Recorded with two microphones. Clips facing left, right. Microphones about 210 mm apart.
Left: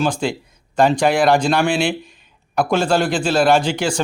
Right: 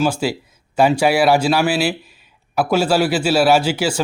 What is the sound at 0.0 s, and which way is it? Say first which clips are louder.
A man's voice: right 1 dB; 5° right (ahead or behind).